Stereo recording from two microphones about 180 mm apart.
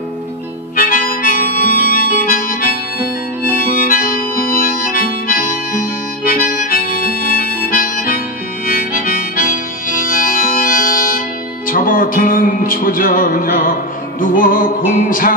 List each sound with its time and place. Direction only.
0.7 s harmonica: 50° left (ahead or behind)
3.7 s harmonica: 50° left (ahead or behind)
14.3 s music: 50° left (ahead or behind)